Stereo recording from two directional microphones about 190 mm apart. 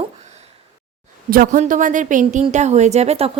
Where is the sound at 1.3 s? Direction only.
45° right (ahead or behind).